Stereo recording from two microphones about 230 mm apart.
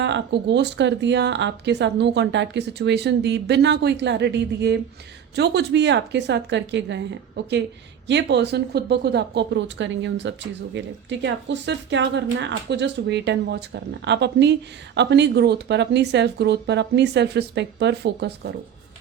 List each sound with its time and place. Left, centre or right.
0.0 s speech: right